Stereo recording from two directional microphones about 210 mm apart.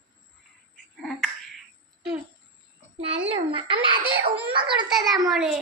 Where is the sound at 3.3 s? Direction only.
25° right (ahead or behind).